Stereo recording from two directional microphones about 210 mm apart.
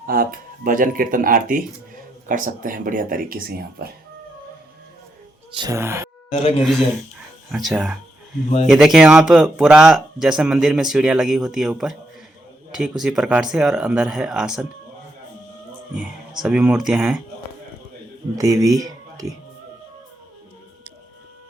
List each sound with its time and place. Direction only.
0.0 s speech: 45° right (ahead or behind)
5.5 s speech: 15° right (ahead or behind)
6.3 s speech: 30° left (ahead or behind)
7.5 s speech: centre (ahead or behind)
16.4 s speech: 5° right (ahead or behind)
18.3 s speech: 15° right (ahead or behind)